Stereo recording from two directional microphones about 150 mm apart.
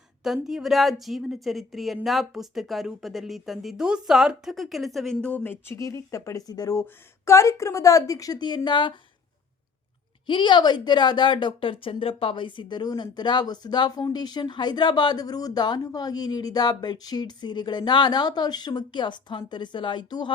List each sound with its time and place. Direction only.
0.4 s a woman's voice: centre (ahead or behind); by 8.9 s 30° left (ahead or behind)
10.2 s a woman's voice: 30° left (ahead or behind)